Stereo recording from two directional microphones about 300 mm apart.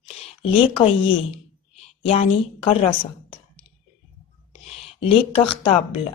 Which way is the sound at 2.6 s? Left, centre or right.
Centre.